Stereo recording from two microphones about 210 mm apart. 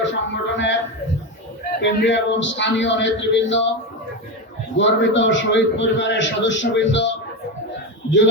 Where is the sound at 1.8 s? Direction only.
60° left (ahead or behind).